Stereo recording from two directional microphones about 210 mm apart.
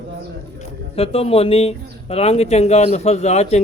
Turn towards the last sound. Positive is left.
turn(degrees=30)  # may be behind; listen again after turning